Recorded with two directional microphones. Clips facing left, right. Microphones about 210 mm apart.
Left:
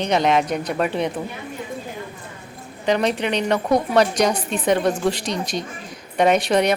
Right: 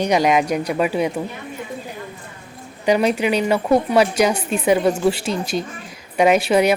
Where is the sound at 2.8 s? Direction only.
10° right (ahead or behind).